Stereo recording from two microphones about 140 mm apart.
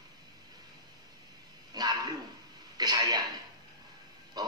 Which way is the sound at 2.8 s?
25° right (ahead or behind).